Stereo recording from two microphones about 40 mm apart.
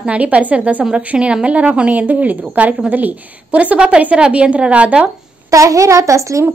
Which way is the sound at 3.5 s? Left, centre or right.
Right.